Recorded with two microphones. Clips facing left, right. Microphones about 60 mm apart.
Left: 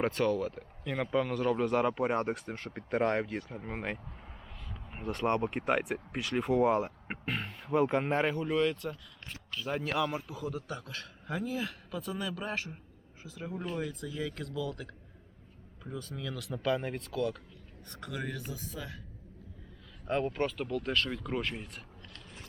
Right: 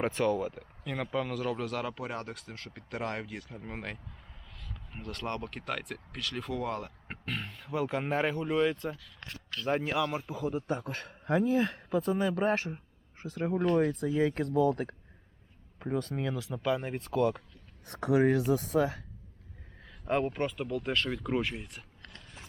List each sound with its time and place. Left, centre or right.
0.1 s speech: centre
0.9 s speech: centre
8.4 s speech: centre
9.3 s a sound: centre
10.1 s a man's voice: right
15.8 s speech: right
16.3 s speech: centre
17.0 s speech: right
17.8 s speech: right
20.1 s speech: right
20.3 s speech: centre